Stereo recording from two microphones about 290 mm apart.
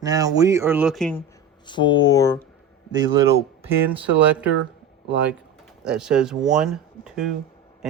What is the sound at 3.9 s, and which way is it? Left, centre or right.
Speech, centre.